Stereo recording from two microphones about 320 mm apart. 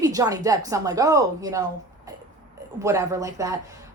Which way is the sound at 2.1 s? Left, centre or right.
Centre.